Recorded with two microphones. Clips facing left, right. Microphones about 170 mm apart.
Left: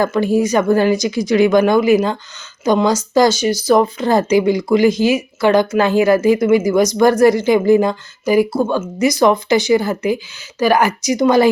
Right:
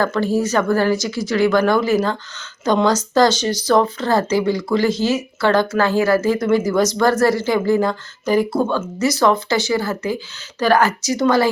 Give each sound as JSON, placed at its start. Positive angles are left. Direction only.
{"t": 0.0, "sound": "speech", "side_deg": 15}